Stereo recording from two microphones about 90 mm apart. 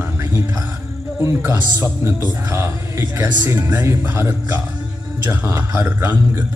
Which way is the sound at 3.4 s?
20° right (ahead or behind).